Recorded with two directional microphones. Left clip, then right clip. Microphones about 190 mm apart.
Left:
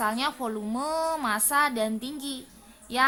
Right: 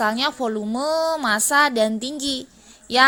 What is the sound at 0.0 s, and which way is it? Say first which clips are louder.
A woman's voice: right 6 dB; 30° right (ahead or behind).